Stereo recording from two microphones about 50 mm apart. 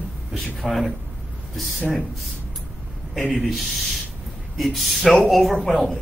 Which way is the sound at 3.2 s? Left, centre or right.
Right.